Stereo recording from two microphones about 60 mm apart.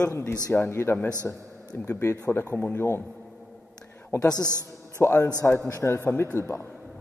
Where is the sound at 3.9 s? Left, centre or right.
Left.